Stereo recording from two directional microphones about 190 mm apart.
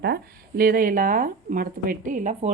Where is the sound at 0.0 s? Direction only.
55° right (ahead or behind).